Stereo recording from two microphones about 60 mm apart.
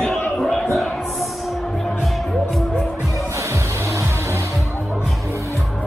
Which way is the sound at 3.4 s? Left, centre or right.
Right.